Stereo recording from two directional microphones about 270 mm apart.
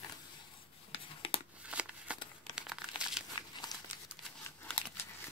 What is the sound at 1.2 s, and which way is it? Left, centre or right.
Tearing, left.